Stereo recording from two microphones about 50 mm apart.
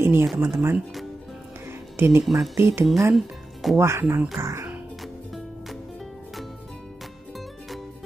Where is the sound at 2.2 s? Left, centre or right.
Centre.